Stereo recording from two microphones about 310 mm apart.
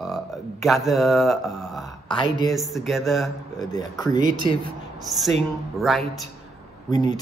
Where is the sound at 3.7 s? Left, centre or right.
Centre.